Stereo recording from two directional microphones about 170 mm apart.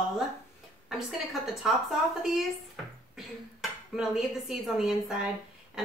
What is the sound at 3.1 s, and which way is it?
A woman's voice, 5° right (ahead or behind).